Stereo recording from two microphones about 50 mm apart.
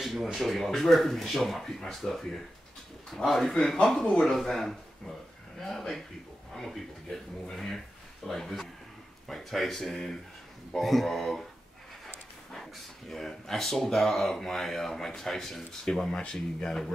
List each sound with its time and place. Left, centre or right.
0.0 s speech: centre
3.7 s speech: centre
4.0 s speech: centre
12.5 s speech: centre